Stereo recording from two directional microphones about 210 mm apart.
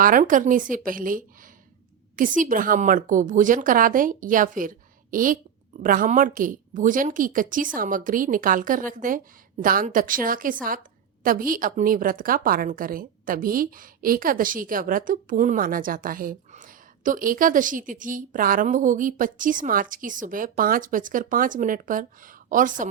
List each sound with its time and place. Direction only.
0.0 s a woman's voice: 40° right (ahead or behind)
2.4 s a woman's voice: 40° right (ahead or behind)